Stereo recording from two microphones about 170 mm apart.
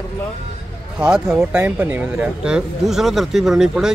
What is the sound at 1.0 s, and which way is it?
A man's voice, 5° right (ahead or behind).